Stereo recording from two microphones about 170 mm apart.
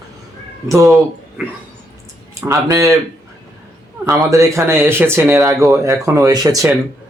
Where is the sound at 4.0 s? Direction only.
15° right (ahead or behind).